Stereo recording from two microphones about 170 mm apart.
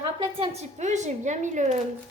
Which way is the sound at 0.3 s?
35° right (ahead or behind).